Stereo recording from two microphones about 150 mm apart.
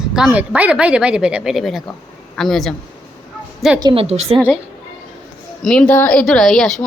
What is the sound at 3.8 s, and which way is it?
Speech, 35° right (ahead or behind).